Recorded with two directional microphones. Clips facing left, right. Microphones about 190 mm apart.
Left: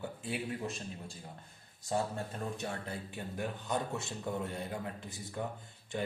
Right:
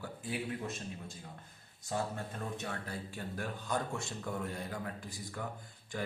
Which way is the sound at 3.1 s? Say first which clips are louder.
Left 3 dB; 20° left (ahead or behind).